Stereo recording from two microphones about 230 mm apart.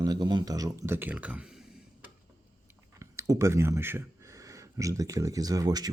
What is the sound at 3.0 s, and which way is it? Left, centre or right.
Speech, centre.